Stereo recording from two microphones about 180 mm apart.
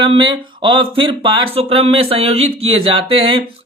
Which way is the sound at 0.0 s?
25° right (ahead or behind).